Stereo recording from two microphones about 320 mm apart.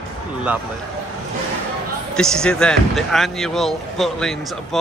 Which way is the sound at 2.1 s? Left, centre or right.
Centre.